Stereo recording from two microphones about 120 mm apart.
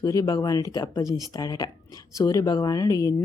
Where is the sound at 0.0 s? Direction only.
30° left (ahead or behind).